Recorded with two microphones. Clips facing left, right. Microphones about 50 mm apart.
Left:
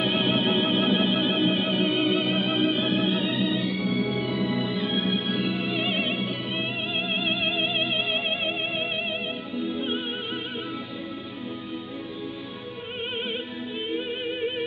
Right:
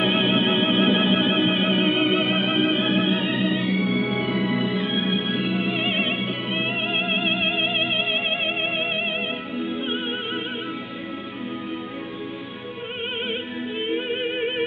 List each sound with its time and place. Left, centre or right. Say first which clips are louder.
0.0 s music: right 3 dB; right
7.2 s music: right 3 dB; right
13.8 s music: right 4 dB; right